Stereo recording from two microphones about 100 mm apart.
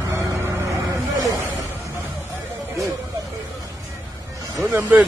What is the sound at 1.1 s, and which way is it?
Snake, 35° right (ahead or behind).